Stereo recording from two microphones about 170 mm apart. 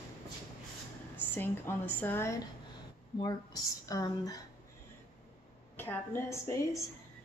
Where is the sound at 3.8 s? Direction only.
20° left (ahead or behind).